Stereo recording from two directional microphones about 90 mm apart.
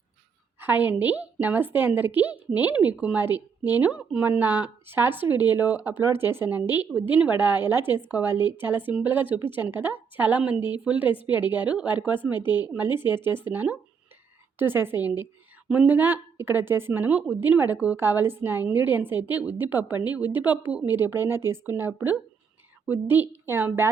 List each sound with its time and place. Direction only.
0.6 s speech: 20° right (ahead or behind)